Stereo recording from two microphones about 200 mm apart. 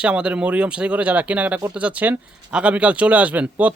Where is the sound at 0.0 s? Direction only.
5° right (ahead or behind).